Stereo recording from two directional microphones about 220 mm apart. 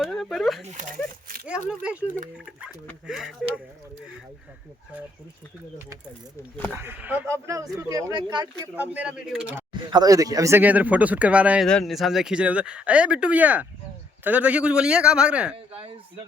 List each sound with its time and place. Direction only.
0.0 s speech: centre (ahead or behind)
0.6 s speech: 35° right (ahead or behind)
1.8 s speech: 5° right (ahead or behind)
3.1 s a man's voice: centre (ahead or behind)
6.7 s speech: 10° right (ahead or behind)
8.7 s speech: 10° right (ahead or behind)
9.7 s a man's voice: 20° right (ahead or behind)
15.7 s speech: 25° right (ahead or behind)